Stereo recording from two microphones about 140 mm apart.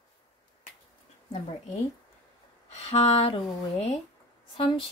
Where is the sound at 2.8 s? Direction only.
45° left (ahead or behind).